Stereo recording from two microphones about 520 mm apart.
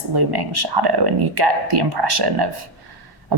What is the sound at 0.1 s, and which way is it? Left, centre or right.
A woman's voice, right.